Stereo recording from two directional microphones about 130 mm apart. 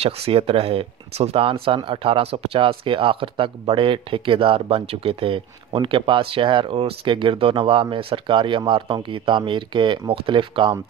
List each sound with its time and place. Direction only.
0.0 s speech: 50° right (ahead or behind)